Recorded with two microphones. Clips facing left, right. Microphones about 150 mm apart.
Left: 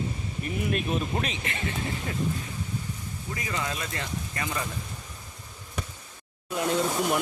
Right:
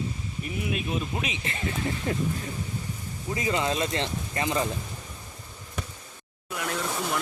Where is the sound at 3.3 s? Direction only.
20° right (ahead or behind).